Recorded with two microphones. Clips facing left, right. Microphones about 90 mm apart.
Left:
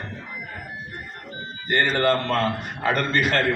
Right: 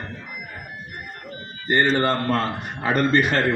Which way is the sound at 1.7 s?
25° right (ahead or behind).